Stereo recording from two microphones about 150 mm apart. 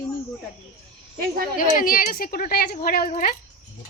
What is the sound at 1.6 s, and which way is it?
Speech, 70° left (ahead or behind).